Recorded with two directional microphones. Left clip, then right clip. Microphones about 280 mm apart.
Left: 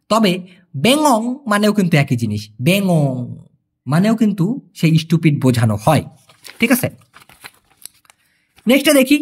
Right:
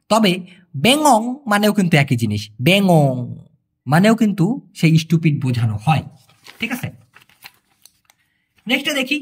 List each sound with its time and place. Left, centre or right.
0.1 s speech: centre
8.6 s speech: centre